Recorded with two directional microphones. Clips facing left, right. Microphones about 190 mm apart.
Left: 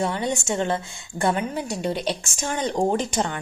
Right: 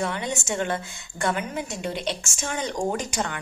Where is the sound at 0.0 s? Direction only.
30° left (ahead or behind).